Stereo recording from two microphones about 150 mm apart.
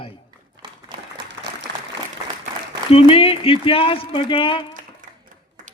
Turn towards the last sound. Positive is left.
turn(degrees=35)  # may be behind; listen again after turning